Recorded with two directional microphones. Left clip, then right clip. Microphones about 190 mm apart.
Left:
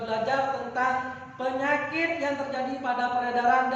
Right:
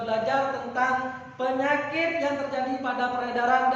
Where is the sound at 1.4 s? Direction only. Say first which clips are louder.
Right 2 dB; 15° right (ahead or behind).